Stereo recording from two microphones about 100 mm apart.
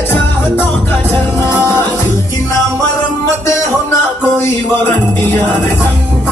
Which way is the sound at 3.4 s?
25° left (ahead or behind).